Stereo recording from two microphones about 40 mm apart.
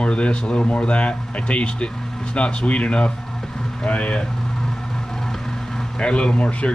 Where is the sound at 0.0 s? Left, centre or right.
Left.